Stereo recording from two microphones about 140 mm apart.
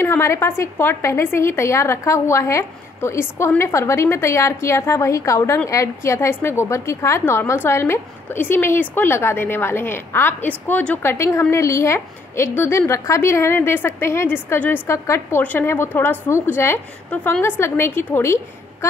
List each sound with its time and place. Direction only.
0.0 s a woman's voice: 20° left (ahead or behind)